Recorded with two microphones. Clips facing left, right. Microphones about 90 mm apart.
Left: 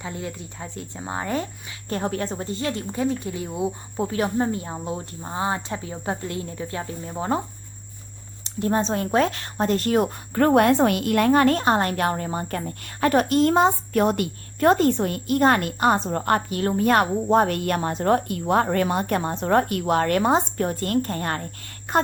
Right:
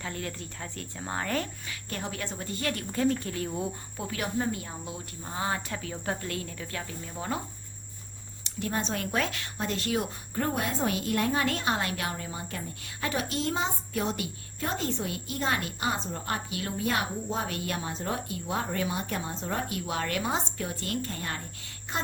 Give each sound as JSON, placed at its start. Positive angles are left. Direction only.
{"t": 0.0, "sound": "speech", "side_deg": 20}
{"t": 1.9, "sound": "speech", "side_deg": 40}
{"t": 3.9, "sound": "speech", "side_deg": 30}
{"t": 8.4, "sound": "speech", "side_deg": 35}
{"t": 10.3, "sound": "a woman's voice", "side_deg": 70}
{"t": 11.4, "sound": "speech", "side_deg": 40}